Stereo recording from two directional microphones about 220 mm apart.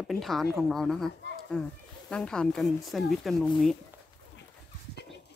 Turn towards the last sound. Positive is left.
turn(degrees=0)  # may be behind; listen again after turning